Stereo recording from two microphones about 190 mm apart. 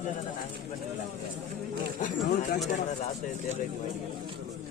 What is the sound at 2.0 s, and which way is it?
Speech, 45° left (ahead or behind).